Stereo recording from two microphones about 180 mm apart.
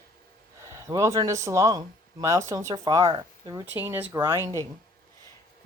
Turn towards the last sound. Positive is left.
turn(degrees=-15)  # may be behind; listen again after turning